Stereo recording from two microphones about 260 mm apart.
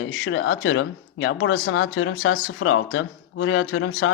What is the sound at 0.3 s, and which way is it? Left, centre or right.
Speech, left.